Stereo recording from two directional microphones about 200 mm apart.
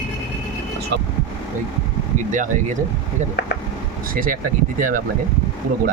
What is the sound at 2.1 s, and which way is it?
Speech, 40° right (ahead or behind).